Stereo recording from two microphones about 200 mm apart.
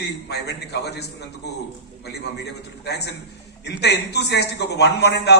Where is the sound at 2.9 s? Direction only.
55° left (ahead or behind).